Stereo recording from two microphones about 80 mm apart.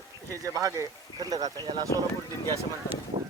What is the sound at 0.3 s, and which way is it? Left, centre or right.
Speech, right.